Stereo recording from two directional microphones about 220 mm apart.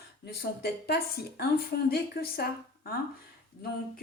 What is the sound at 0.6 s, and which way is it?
A woman's voice, 45° left (ahead or behind).